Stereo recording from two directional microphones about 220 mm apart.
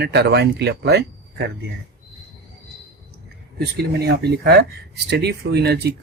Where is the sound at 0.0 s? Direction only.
50° right (ahead or behind).